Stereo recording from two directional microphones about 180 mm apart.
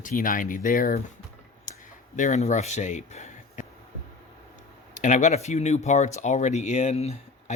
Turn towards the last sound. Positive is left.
turn(degrees=40)  # may be behind; listen again after turning